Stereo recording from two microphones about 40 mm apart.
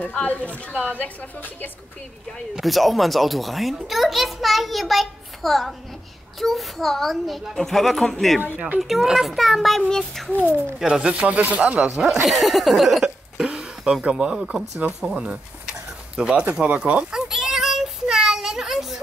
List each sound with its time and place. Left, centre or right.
0.0 s a woman's voice: left
2.6 s a child's voice: centre
10.8 s speech: right
12.0 s a child's voice: centre
13.0 s hiccup: centre
14.1 s speech: centre
14.8 s speech: right
15.1 s speech: right
16.6 s speech: right
17.1 s child singing: centre